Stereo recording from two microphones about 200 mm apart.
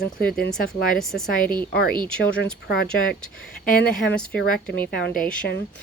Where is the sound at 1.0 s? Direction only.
Centre (ahead or behind).